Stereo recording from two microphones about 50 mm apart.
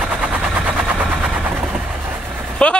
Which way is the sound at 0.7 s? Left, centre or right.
Centre.